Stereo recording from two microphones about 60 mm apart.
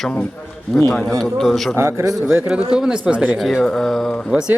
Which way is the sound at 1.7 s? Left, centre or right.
Right.